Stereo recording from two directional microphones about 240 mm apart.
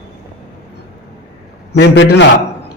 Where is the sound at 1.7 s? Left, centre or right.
Left.